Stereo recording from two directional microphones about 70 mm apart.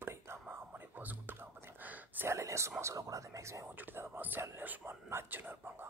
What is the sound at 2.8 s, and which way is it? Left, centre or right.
Speech, right.